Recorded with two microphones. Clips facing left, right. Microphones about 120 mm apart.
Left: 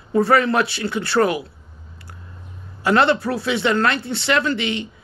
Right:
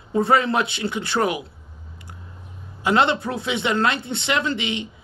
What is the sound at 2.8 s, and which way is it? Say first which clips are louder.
Speech: left 3 dB; 20° right (ahead or behind).